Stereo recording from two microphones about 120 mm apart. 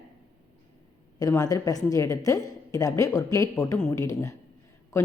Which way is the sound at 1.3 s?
30° left (ahead or behind).